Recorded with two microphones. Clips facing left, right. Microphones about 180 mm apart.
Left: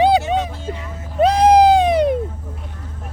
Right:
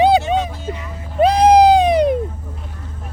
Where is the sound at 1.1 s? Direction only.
15° right (ahead or behind).